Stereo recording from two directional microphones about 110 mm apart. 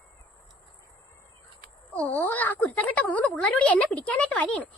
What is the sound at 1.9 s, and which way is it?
Speech, 15° left (ahead or behind).